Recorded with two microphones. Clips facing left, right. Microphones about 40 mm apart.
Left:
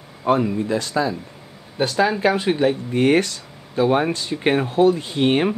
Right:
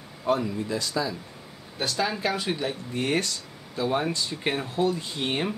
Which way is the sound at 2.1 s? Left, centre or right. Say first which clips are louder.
Left 9 dB; left.